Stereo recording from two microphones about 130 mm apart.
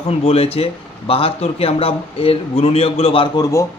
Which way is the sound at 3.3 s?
30° left (ahead or behind).